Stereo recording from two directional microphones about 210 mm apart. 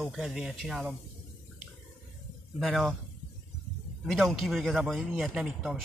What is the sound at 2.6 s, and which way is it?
Speech, centre (ahead or behind).